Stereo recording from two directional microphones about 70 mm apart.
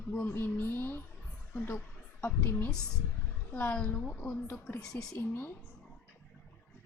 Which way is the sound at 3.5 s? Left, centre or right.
Left.